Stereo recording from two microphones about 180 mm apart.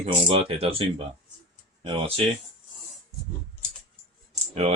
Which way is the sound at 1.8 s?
30° right (ahead or behind).